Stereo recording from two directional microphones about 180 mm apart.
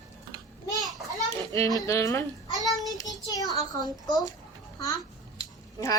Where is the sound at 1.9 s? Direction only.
15° left (ahead or behind).